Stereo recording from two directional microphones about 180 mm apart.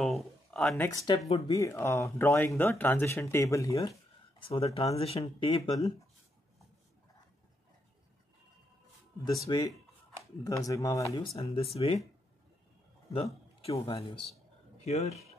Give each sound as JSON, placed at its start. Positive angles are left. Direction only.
{"t": 0.0, "sound": "a sound", "side_deg": 0}
{"t": 0.8, "sound": "speech", "side_deg": 20}
{"t": 4.4, "sound": "speech", "side_deg": 30}
{"t": 5.8, "sound": "speech", "side_deg": 20}
{"t": 9.2, "sound": "speech", "side_deg": 20}
{"t": 11.3, "sound": "speech", "side_deg": 35}
{"t": 13.7, "sound": "speech", "side_deg": 35}